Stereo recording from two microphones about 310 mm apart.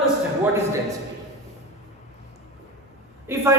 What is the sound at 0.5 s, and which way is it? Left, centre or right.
Speech, centre.